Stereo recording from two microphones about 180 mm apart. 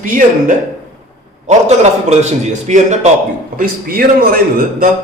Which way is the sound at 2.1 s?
40° right (ahead or behind).